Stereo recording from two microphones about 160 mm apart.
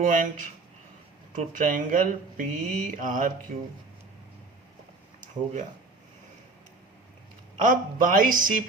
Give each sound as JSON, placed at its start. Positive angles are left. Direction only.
{"t": 0.0, "sound": "speech", "side_deg": -55}
{"t": 7.6, "sound": "speech", "side_deg": -60}